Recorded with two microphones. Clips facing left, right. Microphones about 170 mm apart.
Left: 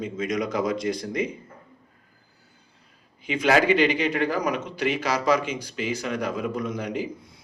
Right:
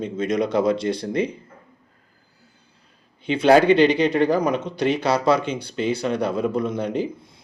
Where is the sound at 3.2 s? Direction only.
30° right (ahead or behind).